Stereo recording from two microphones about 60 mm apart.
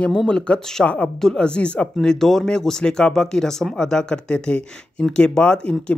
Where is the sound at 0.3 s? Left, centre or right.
Centre.